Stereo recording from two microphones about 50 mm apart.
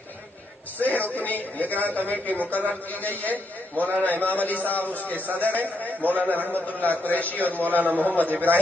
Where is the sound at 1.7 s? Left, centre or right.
Right.